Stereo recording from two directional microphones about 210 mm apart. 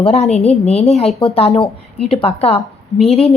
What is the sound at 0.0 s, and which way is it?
A woman's voice, 30° left (ahead or behind).